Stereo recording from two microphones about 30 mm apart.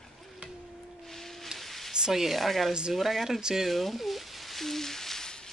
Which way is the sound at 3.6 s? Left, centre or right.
Centre.